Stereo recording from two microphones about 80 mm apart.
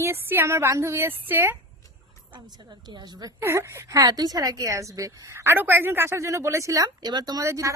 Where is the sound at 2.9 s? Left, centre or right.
Right.